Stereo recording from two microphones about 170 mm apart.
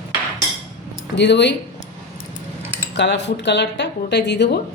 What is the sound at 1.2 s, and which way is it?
Speech, 90° left.